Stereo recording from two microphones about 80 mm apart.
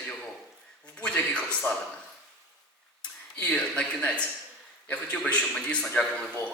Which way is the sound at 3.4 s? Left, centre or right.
Centre.